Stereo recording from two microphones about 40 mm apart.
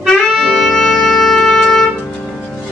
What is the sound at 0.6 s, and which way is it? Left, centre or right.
Music, centre.